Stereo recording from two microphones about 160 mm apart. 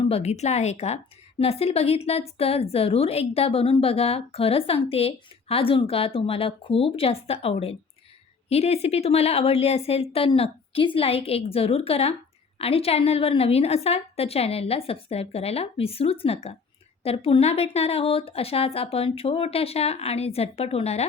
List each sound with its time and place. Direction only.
0.0 s a woman's voice: 40° left (ahead or behind)